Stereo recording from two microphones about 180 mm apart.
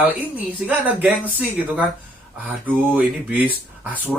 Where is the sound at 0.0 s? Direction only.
10° right (ahead or behind).